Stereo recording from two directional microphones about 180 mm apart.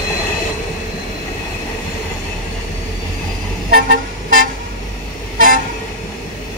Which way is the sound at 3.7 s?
50° right (ahead or behind).